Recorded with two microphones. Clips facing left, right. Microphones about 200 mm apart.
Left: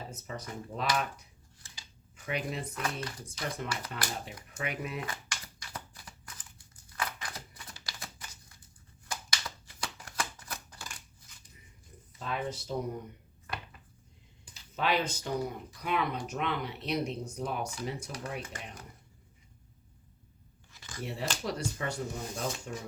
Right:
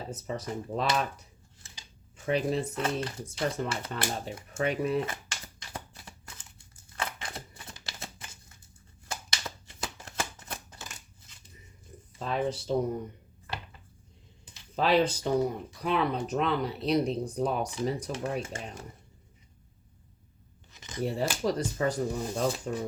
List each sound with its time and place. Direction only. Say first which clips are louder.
0.3 s speech: right 7 dB; 30° right (ahead or behind)
6.9 s a sound: right 2 dB; 25° right (ahead or behind)
9.0 s shuffling cards: right 2 dB; 25° right (ahead or behind)
12.2 s speech: right 5 dB; 30° right (ahead or behind)
14.8 s speech: right 6 dB; 35° right (ahead or behind)
20.7 s scissors: right 5 dB; 20° right (ahead or behind)
21.0 s speech: right 7 dB; 35° right (ahead or behind)